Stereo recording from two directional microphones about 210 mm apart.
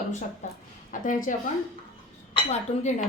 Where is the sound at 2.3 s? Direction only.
30° left (ahead or behind).